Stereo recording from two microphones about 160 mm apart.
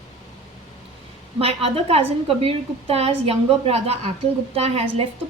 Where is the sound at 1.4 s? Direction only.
35° right (ahead or behind).